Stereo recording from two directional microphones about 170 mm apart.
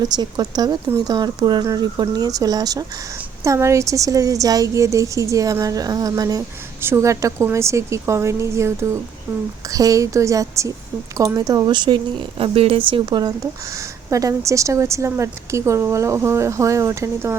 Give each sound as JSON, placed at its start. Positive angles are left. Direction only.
{"t": 0.0, "sound": "a woman's voice", "side_deg": -25}